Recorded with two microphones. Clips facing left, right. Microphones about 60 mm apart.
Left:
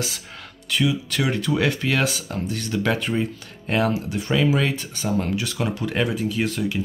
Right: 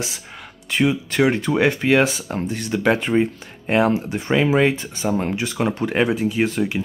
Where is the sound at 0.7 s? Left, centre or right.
Right.